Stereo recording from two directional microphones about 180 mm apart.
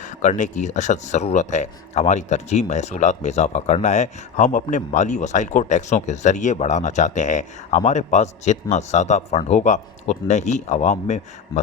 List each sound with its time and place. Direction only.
0.0 s speech: 45° left (ahead or behind)